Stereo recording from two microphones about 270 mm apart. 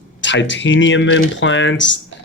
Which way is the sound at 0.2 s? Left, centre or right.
Left.